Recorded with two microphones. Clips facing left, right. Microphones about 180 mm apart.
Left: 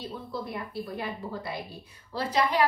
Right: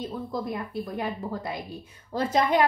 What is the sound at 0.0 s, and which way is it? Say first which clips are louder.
Speech: right 4 dB; 45° right (ahead or behind).